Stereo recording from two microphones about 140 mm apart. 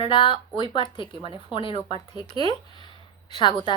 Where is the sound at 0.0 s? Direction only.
35° left (ahead or behind).